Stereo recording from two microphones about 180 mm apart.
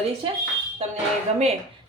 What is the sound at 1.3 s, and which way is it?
Speech, 35° right (ahead or behind).